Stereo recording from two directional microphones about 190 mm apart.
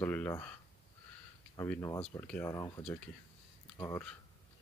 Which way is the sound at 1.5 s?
15° left (ahead or behind).